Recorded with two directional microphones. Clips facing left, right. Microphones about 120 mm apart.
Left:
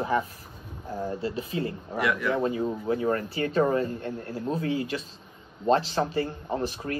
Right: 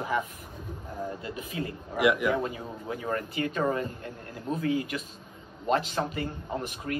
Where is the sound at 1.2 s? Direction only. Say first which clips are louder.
Left 5 dB; 30° left (ahead or behind).